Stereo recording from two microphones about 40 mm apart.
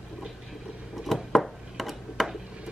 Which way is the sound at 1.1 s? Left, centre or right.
Centre.